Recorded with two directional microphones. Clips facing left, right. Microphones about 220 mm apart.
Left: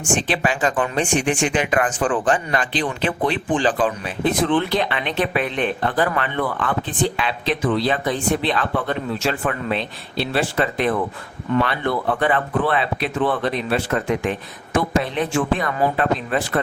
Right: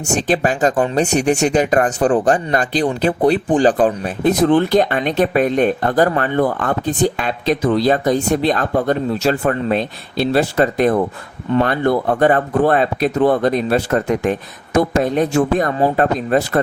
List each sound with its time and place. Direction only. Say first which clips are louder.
0.1 s speech: right 4 dB; 40° right (ahead or behind)